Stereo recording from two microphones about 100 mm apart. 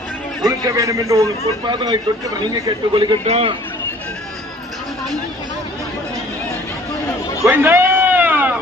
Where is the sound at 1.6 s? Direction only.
50° right (ahead or behind).